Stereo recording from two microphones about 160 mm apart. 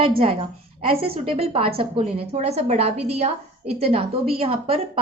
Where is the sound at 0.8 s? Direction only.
35° right (ahead or behind).